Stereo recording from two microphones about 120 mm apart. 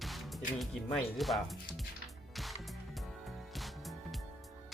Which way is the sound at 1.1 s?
Centre (ahead or behind).